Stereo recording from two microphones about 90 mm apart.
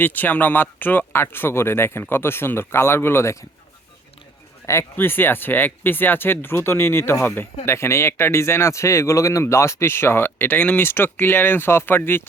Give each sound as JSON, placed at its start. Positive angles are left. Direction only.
{"t": 0.0, "sound": "speech", "side_deg": 20}
{"t": 4.6, "sound": "speech", "side_deg": 30}